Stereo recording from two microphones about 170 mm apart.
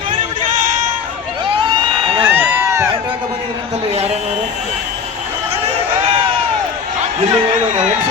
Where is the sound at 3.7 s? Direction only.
35° right (ahead or behind).